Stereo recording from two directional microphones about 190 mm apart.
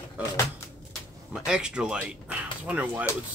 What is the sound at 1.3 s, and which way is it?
Speech, 5° right (ahead or behind).